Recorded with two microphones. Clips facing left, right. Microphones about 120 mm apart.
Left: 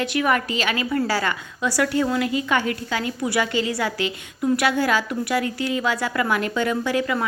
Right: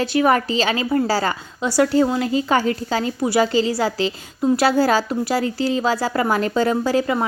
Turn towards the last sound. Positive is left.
turn(degrees=-35)  # may be behind; listen again after turning